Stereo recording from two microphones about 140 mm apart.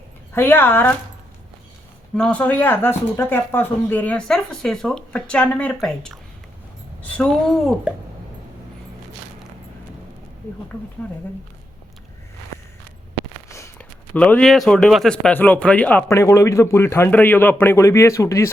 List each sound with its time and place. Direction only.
0.3 s a man's voice: 15° left (ahead or behind)
2.1 s a man's voice: 5° left (ahead or behind)
11.0 s a man's voice: 10° left (ahead or behind)
13.5 s a sound: 20° left (ahead or behind)
14.1 s a man's voice: 10° left (ahead or behind)